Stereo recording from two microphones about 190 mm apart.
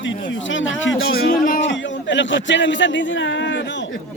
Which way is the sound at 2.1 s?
75° left (ahead or behind).